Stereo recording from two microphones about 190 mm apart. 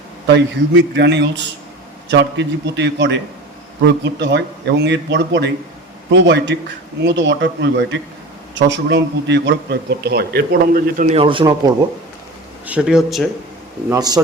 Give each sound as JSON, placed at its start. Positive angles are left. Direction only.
{"t": 0.3, "sound": "a man's voice", "side_deg": -70}
{"t": 12.6, "sound": "speech", "side_deg": -5}
{"t": 13.9, "sound": "a man's voice", "side_deg": -20}